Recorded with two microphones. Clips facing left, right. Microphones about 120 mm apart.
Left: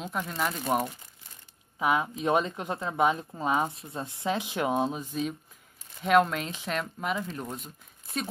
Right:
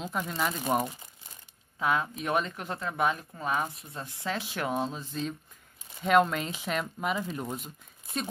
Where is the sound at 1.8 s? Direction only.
15° left (ahead or behind).